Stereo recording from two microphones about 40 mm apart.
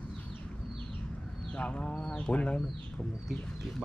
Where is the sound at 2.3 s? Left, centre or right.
Left.